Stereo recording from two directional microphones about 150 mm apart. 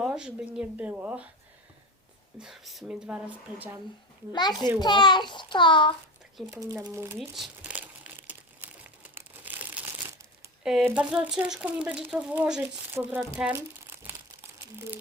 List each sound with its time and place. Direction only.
0.0 s speech: 5° right (ahead or behind)
2.4 s speech: centre (ahead or behind)
4.3 s a child's voice: 30° left (ahead or behind)
6.5 s speech: 20° right (ahead or behind)
7.2 s crumpling: centre (ahead or behind)
10.6 s speech: 5° right (ahead or behind)